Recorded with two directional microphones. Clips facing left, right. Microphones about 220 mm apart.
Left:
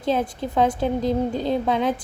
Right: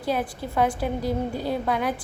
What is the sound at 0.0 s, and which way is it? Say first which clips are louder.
A woman's voice: left 4 dB; 20° left (ahead or behind).